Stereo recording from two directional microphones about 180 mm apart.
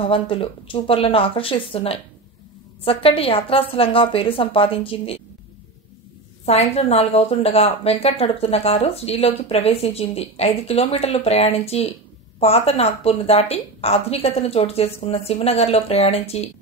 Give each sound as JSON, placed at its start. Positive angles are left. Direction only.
{"t": 0.0, "sound": "a woman's voice", "side_deg": 30}
{"t": 6.4, "sound": "a woman's voice", "side_deg": 35}